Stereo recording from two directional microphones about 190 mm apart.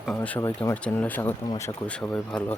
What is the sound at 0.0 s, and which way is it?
Speech, 5° left (ahead or behind).